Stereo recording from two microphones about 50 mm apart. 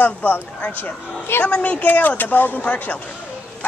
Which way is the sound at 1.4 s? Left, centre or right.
Left.